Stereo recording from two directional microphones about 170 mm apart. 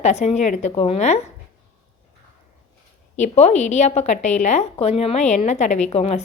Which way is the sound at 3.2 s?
40° left (ahead or behind).